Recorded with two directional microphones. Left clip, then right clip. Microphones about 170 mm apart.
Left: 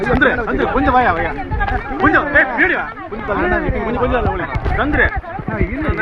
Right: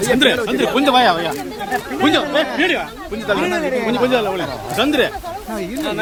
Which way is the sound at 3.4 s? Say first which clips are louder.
Left 6 dB; 10° left (ahead or behind).